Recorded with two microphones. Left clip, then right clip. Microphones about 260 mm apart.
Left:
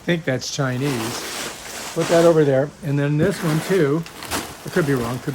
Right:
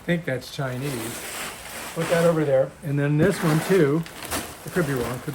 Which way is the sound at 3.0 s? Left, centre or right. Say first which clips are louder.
Left 1 dB; centre.